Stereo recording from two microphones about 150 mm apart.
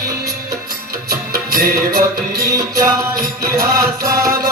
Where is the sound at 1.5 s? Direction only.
85° right.